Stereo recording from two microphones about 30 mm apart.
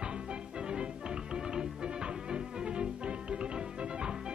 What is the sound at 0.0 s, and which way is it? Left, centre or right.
Music, right.